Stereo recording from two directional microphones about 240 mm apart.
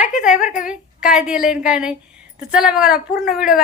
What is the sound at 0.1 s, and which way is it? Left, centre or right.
A woman's voice, centre.